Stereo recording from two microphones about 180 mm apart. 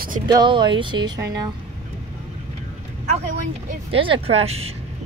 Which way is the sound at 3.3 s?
45° right (ahead or behind).